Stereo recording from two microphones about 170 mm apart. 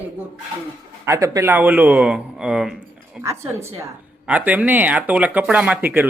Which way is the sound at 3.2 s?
15° right (ahead or behind).